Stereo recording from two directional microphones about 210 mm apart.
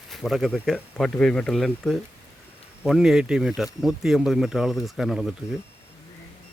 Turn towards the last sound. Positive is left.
turn(degrees=0)  # may be behind; listen again after turning